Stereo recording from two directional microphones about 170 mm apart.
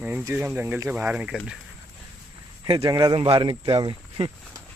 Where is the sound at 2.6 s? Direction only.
20° right (ahead or behind).